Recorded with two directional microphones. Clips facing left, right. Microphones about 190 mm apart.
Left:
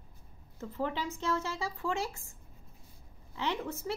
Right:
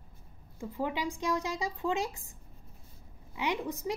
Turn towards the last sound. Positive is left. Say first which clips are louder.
# right 2 dB
turn(degrees=-15)  # may be behind; listen again after turning